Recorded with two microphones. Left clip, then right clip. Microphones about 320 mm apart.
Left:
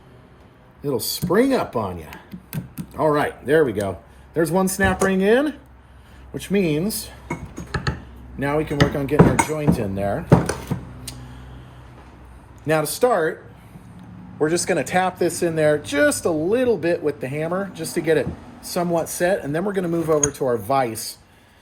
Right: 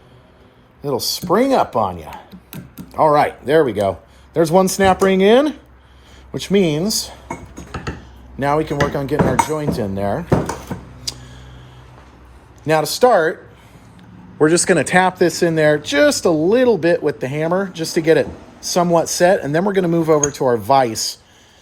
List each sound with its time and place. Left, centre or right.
0.8 s dishes: centre
4.4 s speech: centre
8.4 s dishes: centre
12.6 s speech: right
14.3 s speech: right